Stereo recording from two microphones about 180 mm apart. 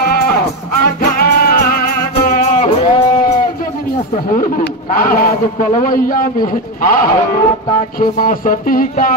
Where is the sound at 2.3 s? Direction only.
40° left (ahead or behind).